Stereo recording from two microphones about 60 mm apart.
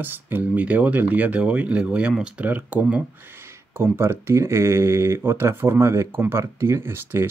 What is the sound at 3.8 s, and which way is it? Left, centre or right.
Speech, right.